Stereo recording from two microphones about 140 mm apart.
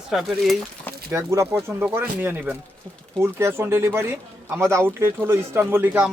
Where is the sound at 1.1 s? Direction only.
20° right (ahead or behind).